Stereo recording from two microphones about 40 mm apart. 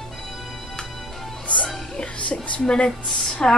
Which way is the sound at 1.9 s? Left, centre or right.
Left.